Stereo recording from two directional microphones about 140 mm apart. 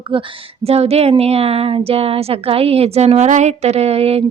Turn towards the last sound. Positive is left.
turn(degrees=-45)  # may be behind; listen again after turning